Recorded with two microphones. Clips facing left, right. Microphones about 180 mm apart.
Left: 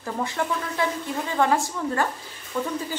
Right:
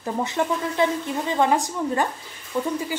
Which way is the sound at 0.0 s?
20° right (ahead or behind).